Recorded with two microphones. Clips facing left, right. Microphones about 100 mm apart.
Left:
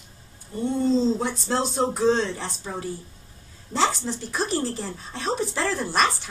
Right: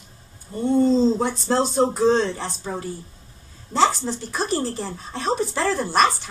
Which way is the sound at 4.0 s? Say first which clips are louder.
Right 2 dB; 35° right (ahead or behind).